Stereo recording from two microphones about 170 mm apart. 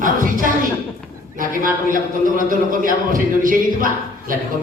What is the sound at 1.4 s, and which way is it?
A man's voice, 55° right (ahead or behind).